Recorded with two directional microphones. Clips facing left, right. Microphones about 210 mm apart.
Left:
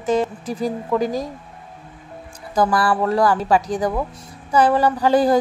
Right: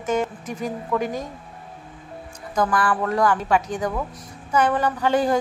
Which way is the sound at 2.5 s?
35° left (ahead or behind).